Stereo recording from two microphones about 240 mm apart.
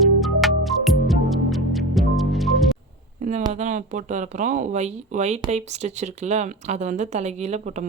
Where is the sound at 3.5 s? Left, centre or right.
Right.